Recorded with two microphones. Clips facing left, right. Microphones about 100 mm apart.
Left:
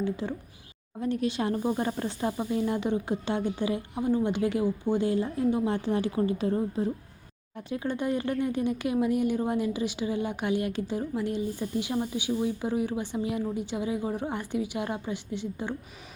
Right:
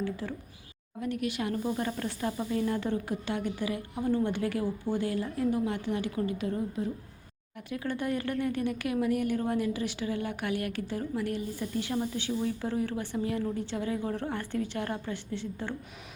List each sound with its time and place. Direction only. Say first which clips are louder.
0.0 s speech: left 4 dB; 20° left (ahead or behind)